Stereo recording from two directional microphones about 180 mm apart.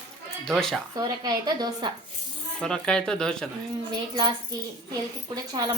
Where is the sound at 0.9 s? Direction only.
20° right (ahead or behind).